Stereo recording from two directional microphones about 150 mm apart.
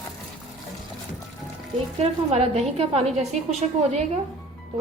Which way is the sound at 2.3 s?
45° right (ahead or behind).